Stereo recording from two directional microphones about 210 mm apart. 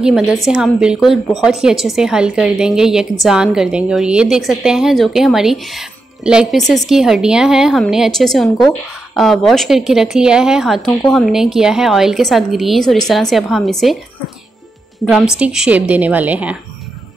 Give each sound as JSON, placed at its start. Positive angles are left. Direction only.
{"t": 0.0, "sound": "a woman's voice", "side_deg": 0}
{"t": 15.0, "sound": "a woman's voice", "side_deg": -5}